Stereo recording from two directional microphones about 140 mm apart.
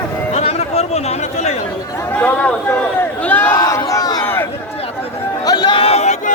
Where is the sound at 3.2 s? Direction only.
15° left (ahead or behind).